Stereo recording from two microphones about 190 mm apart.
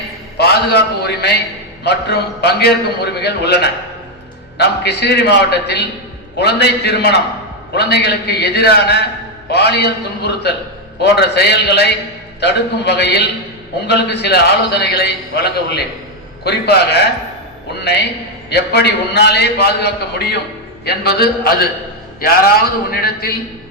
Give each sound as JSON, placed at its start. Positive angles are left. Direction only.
{"t": 0.3, "sound": "a man's voice", "side_deg": 60}